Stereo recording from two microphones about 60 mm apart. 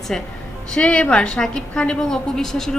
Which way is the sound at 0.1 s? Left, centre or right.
Centre.